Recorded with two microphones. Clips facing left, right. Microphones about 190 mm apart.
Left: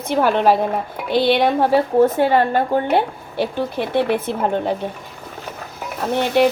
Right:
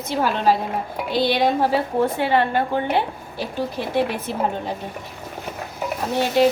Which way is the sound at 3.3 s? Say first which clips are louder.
Left 5 dB; 60° left (ahead or behind).